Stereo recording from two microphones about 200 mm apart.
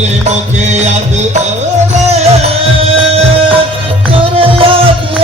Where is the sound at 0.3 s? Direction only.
35° right (ahead or behind).